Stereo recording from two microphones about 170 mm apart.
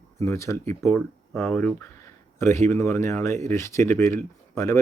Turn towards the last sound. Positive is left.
turn(degrees=20)  # may be behind; listen again after turning